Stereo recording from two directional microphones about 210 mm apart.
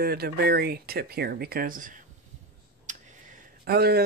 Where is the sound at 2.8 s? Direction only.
35° right (ahead or behind).